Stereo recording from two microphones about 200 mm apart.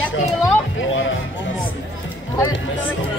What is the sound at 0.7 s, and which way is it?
Music, 70° left (ahead or behind).